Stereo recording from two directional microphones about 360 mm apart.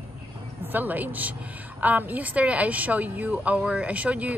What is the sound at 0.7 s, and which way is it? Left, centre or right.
A woman's voice, centre.